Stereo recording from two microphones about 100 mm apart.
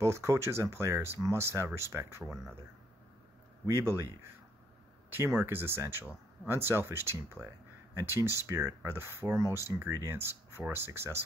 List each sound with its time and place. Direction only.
0.0 s speech: 30° right (ahead or behind)
2.2 s speech: centre (ahead or behind)
3.6 s speech: 30° right (ahead or behind)